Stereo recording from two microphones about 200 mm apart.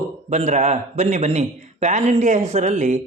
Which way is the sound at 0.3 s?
35° right (ahead or behind).